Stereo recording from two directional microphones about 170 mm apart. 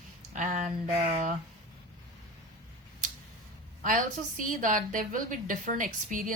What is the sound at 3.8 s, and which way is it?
A woman's voice, 50° right (ahead or behind).